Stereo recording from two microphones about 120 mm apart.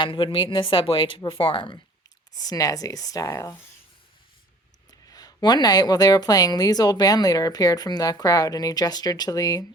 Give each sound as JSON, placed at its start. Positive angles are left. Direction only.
{"t": 0.0, "sound": "speech", "side_deg": 45}
{"t": 2.3, "sound": "speech", "side_deg": 30}
{"t": 4.9, "sound": "a woman's voice", "side_deg": 30}